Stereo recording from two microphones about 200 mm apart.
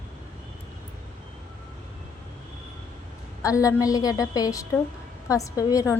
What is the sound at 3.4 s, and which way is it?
A woman's voice, 15° left (ahead or behind).